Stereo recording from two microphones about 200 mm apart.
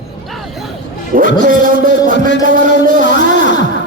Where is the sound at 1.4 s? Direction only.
40° right (ahead or behind).